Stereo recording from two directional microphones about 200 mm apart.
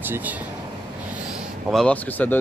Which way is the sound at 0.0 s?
10° right (ahead or behind).